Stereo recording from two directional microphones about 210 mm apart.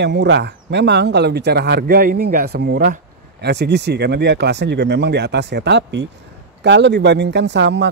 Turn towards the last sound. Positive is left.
turn(degrees=-55)  # may be behind; listen again after turning